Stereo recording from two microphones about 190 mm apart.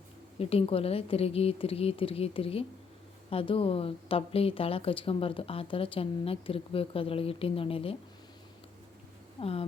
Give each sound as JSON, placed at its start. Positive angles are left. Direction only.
{"t": 0.3, "sound": "a woman's voice", "side_deg": 30}
{"t": 9.4, "sound": "a woman's voice", "side_deg": 30}